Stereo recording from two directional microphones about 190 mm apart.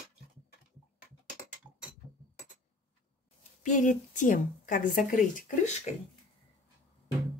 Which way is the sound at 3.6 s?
40° left (ahead or behind).